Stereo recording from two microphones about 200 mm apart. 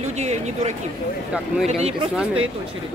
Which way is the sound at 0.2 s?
35° right (ahead or behind).